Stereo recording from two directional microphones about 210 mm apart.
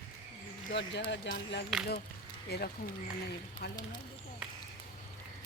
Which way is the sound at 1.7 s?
Centre (ahead or behind).